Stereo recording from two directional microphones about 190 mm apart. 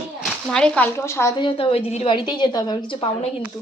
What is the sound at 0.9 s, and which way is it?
A woman's voice, 15° left (ahead or behind).